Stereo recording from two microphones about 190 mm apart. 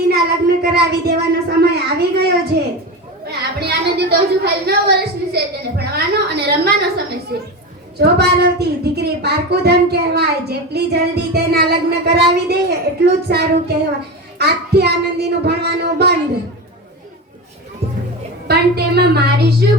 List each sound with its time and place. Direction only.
0.1 s child singing: 55° right (ahead or behind)
2.5 s a woman's voice: 60° right (ahead or behind)
7.9 s speech: 60° right (ahead or behind)
18.4 s speech: 60° right (ahead or behind)